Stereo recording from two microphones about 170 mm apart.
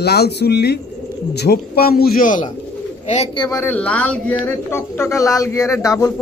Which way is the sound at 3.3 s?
25° left (ahead or behind).